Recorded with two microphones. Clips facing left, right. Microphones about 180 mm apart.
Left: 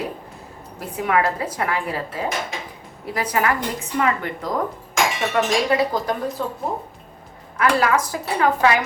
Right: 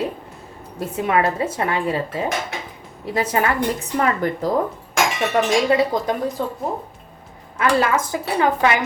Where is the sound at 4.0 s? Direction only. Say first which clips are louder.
Right 1 dB; 35° right (ahead or behind).